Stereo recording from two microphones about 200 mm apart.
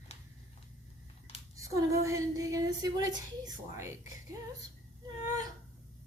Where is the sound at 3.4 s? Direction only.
15° right (ahead or behind).